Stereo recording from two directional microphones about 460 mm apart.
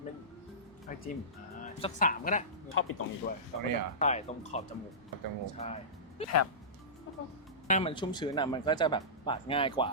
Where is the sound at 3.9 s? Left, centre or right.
Centre.